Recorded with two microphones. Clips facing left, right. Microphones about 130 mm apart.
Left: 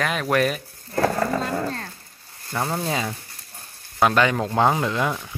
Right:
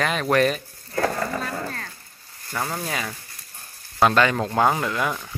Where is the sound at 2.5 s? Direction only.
20° left (ahead or behind).